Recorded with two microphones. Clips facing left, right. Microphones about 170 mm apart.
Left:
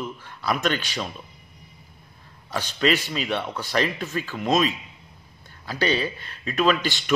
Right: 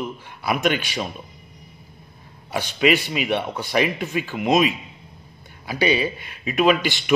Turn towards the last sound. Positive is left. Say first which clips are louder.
# right 3 dB
turn(degrees=-15)  # may be behind; listen again after turning